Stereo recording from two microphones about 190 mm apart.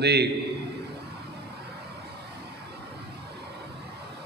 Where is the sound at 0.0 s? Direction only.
60° right (ahead or behind).